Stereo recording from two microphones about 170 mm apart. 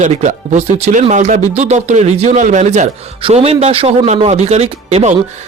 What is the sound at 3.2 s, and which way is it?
Speech, 35° right (ahead or behind).